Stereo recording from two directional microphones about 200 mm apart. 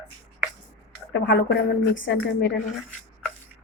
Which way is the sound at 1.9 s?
65° left (ahead or behind).